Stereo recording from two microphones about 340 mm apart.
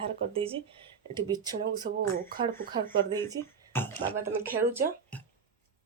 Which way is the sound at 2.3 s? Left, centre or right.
Right.